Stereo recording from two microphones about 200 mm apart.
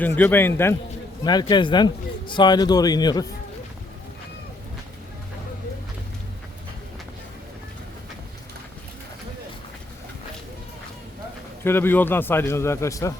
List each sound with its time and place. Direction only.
0.2 s a man's voice: 10° left (ahead or behind)
11.6 s a man's voice: 10° left (ahead or behind)